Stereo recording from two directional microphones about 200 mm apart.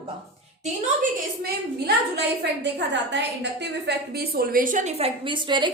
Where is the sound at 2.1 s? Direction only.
60° right (ahead or behind); by 5.6 s 25° right (ahead or behind).